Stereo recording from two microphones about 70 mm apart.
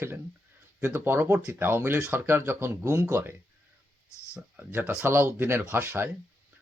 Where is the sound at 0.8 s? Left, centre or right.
Right.